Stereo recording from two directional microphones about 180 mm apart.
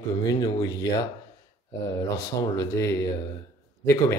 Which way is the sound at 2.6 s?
15° left (ahead or behind).